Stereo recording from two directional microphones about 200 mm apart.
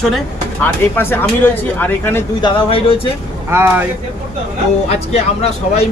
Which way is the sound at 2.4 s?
25° left (ahead or behind).